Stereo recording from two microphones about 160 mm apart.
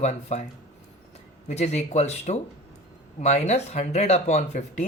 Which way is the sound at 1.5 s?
45° left (ahead or behind).